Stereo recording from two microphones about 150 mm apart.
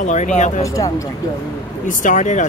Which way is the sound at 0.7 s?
20° left (ahead or behind).